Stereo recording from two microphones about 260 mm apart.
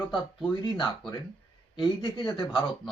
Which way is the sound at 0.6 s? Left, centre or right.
Centre.